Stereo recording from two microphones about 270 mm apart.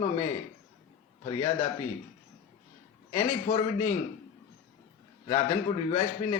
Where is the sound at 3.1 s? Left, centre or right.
Left.